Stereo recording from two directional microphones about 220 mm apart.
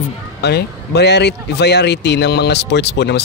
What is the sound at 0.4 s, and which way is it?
A man's voice, 50° left (ahead or behind).